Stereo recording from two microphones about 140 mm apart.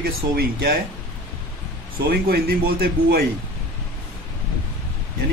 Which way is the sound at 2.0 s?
90° right.